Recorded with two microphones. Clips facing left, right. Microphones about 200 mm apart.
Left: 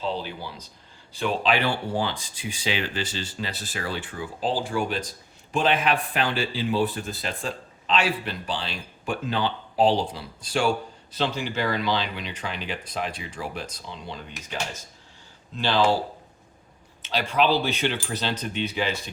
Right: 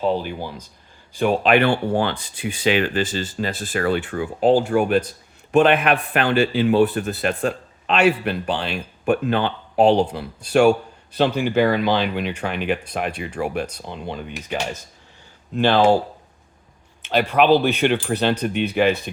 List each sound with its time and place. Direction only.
0.0 s a man's voice: 50° right (ahead or behind)
17.0 s a man's voice: 60° right (ahead or behind)